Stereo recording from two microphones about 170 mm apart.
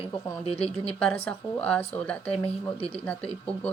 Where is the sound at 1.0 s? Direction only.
5° left (ahead or behind).